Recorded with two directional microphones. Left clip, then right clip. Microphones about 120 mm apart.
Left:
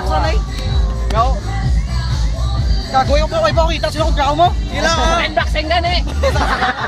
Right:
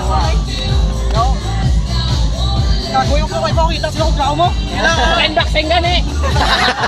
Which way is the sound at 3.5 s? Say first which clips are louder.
Left 1 dB; 30° left (ahead or behind).